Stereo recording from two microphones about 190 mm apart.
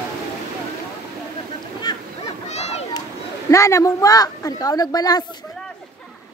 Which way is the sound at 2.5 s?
35° left (ahead or behind).